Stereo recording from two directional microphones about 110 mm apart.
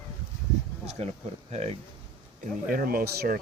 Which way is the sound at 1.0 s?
75° right (ahead or behind).